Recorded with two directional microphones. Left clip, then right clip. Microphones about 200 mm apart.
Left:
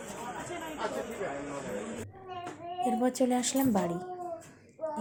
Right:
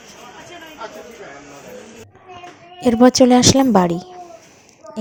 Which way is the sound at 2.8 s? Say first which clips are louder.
Right 17 dB; 40° right (ahead or behind).